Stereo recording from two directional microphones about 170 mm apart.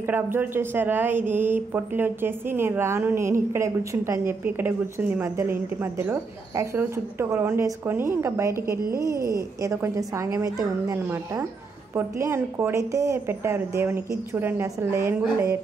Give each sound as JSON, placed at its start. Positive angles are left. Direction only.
{"t": 0.1, "sound": "a woman's voice", "side_deg": -10}